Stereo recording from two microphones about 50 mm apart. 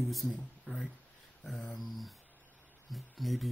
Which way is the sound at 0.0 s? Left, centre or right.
Centre.